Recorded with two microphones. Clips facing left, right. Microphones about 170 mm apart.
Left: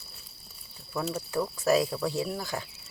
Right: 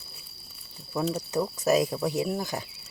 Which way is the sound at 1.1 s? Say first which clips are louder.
Right 2 dB; 20° right (ahead or behind).